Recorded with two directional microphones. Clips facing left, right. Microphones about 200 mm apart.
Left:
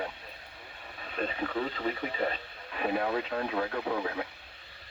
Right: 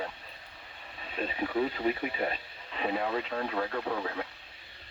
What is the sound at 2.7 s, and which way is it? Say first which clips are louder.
Speech: left 1 dB; 5° left (ahead or behind).